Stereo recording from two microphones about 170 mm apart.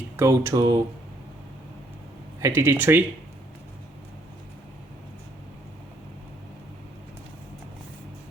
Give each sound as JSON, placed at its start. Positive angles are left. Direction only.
{"t": 0.2, "sound": "speech", "side_deg": -15}
{"t": 2.4, "sound": "speech", "side_deg": -15}